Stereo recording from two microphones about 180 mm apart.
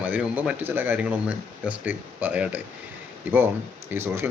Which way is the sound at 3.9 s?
15° right (ahead or behind).